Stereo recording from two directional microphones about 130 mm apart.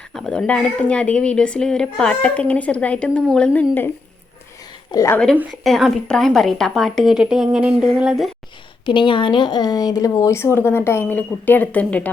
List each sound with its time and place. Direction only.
0.1 s speech: 5° left (ahead or behind)
4.9 s speech: 25° left (ahead or behind)
5.1 s a woman's voice: 10° left (ahead or behind)
8.9 s speech: 40° left (ahead or behind); by 12.0 s 10° left (ahead or behind)